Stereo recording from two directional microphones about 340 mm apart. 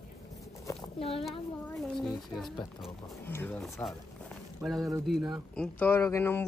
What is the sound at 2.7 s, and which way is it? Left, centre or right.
Speech, centre.